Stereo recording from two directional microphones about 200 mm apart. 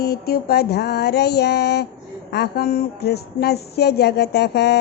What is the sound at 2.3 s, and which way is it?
A woman's voice, 50° left (ahead or behind).